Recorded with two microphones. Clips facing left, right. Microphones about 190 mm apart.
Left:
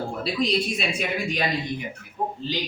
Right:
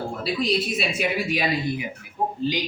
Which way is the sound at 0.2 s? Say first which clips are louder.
Even; centre (ahead or behind).